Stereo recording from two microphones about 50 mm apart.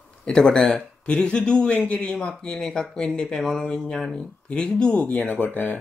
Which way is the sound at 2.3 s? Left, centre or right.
Centre.